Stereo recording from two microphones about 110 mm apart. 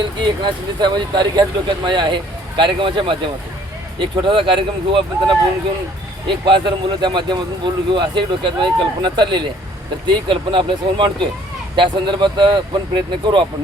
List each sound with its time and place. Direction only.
0.0 s speech: 45° right (ahead or behind)